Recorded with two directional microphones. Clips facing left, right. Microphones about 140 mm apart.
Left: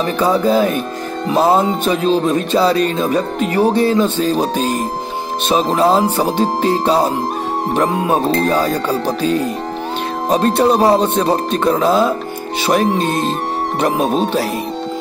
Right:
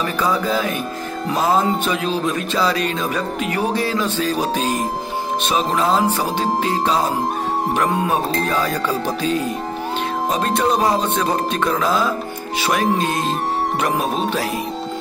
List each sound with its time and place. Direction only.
0.0 s speech: 30° left (ahead or behind)
5.7 s speech: 35° left (ahead or behind)
8.1 s speech: 35° left (ahead or behind)
13.7 s speech: 30° left (ahead or behind)